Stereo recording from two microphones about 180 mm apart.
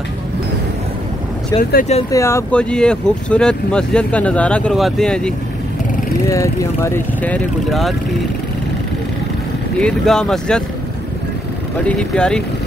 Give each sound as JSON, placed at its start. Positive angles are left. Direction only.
{"t": 1.6, "sound": "speech", "side_deg": 50}
{"t": 2.0, "sound": "speech", "side_deg": 15}
{"t": 6.2, "sound": "speech", "side_deg": 15}
{"t": 9.8, "sound": "speech", "side_deg": 5}
{"t": 11.8, "sound": "speech", "side_deg": 5}